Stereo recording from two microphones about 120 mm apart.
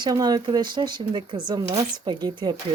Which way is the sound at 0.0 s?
35° right (ahead or behind).